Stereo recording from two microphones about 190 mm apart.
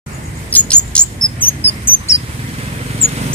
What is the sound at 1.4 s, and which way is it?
Cricket, 10° left (ahead or behind).